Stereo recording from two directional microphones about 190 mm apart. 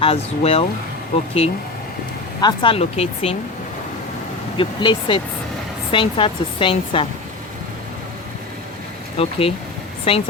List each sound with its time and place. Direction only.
0.0 s a woman's voice: 30° left (ahead or behind)
4.5 s a woman's voice: 25° left (ahead or behind)
9.2 s a woman's voice: 30° left (ahead or behind)